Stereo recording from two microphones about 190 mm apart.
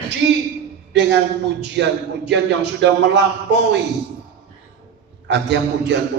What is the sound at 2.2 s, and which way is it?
A man's voice, 65° right (ahead or behind).